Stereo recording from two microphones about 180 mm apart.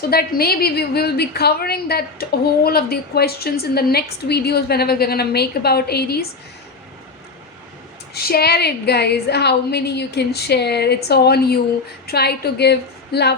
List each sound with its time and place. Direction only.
0.1 s a woman's voice: 60° left (ahead or behind)
8.1 s a woman's voice: 60° left (ahead or behind)